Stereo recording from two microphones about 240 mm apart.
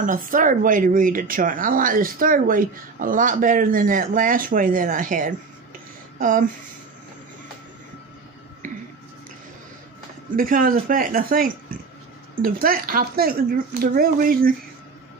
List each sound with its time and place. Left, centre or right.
0.3 s speech: right
8.6 s a sound: right
10.3 s speech: right